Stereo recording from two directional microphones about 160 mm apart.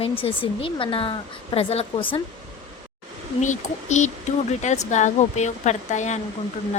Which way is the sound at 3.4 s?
50° left (ahead or behind).